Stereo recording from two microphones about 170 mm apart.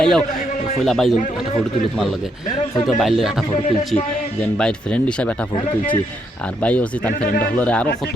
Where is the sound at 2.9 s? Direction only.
Centre (ahead or behind).